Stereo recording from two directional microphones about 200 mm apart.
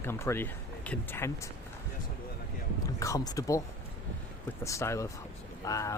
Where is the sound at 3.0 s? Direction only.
15° left (ahead or behind).